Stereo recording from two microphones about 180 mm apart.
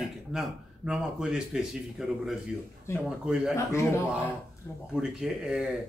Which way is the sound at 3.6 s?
15° left (ahead or behind).